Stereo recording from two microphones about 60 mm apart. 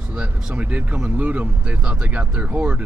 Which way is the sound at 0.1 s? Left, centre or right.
Right.